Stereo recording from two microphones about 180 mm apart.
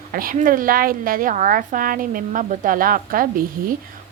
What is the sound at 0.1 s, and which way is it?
A woman's voice, 50° right (ahead or behind).